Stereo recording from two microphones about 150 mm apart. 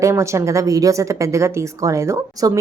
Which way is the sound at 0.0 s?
20° right (ahead or behind).